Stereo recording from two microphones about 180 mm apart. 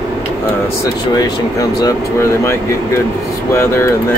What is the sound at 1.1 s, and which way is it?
Speech, 20° left (ahead or behind).